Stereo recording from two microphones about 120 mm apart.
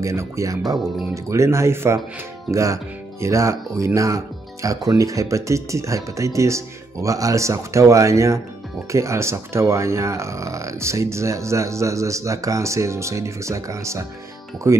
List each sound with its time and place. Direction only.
0.0 s speech: 25° right (ahead or behind)